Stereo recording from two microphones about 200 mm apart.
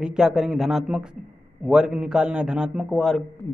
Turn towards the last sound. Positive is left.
turn(degrees=0)  # may be behind; listen again after turning